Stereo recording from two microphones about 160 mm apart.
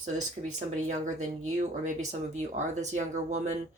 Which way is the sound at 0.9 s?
50° right (ahead or behind).